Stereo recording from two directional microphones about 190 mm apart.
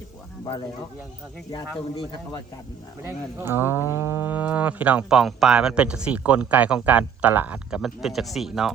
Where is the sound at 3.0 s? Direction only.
10° right (ahead or behind).